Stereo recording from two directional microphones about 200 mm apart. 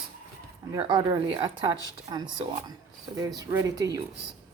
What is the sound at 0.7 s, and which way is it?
Speech, 20° right (ahead or behind).